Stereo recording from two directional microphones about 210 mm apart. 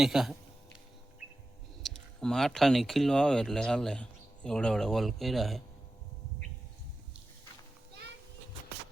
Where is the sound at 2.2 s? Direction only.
5° left (ahead or behind).